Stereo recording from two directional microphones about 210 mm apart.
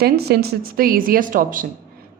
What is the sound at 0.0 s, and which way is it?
A woman's voice, 50° right (ahead or behind).